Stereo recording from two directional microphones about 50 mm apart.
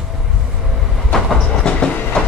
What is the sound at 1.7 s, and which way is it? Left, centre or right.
Train, centre.